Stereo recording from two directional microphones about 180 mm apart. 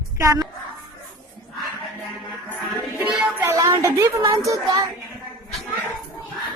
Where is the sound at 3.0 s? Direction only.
10° right (ahead or behind).